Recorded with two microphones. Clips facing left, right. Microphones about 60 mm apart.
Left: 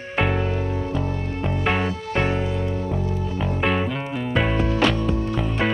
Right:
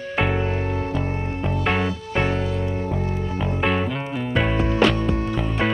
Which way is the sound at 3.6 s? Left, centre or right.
Centre.